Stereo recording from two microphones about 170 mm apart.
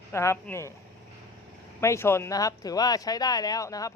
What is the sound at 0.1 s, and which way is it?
Speech, 15° left (ahead or behind).